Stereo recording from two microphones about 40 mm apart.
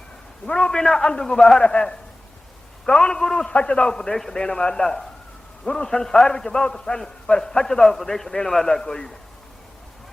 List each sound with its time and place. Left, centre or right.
0.4 s a man's voice: left
0.8 s a man's voice: centre
3.5 s a man's voice: left